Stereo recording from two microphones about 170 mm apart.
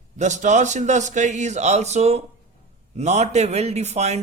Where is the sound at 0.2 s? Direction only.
45° right (ahead or behind).